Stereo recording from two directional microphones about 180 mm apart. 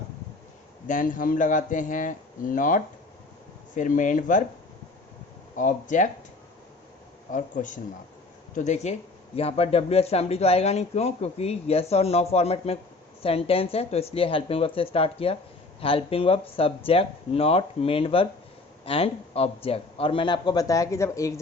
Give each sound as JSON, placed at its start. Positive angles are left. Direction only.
{"t": 0.9, "sound": "speech", "side_deg": 45}
{"t": 5.5, "sound": "speech", "side_deg": 45}
{"t": 7.3, "sound": "speech", "side_deg": 45}